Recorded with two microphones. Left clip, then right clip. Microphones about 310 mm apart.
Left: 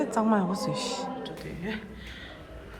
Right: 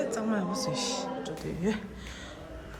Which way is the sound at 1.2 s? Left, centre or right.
Right.